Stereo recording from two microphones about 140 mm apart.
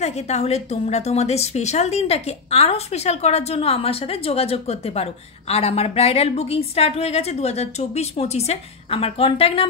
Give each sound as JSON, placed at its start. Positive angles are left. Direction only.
{"t": 0.0, "sound": "a woman's voice", "side_deg": 50}